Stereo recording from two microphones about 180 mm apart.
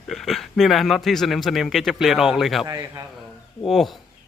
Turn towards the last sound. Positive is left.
turn(degrees=0)  # may be behind; listen again after turning